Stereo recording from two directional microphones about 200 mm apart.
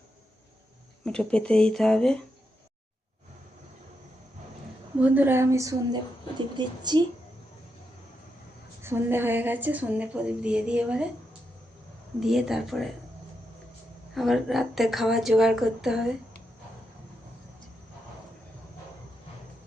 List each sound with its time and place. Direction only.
1.0 s a woman's voice: 5° left (ahead or behind)
4.9 s a woman's voice: 10° right (ahead or behind)
8.8 s a woman's voice: 10° right (ahead or behind)
12.2 s a woman's voice: centre (ahead or behind)
14.2 s a woman's voice: centre (ahead or behind)